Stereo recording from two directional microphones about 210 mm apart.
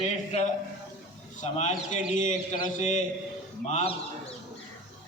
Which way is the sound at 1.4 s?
35° left (ahead or behind).